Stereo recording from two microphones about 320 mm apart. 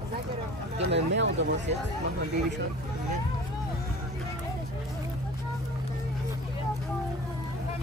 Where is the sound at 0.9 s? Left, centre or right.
Right.